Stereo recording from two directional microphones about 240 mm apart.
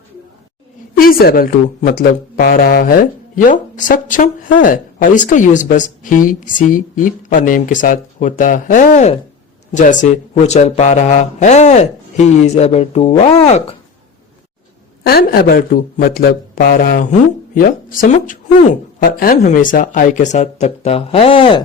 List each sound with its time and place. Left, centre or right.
1.0 s a woman's voice: left
15.0 s a woman's voice: left